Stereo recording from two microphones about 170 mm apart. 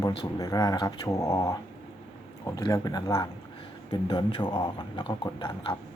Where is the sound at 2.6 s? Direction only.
20° left (ahead or behind).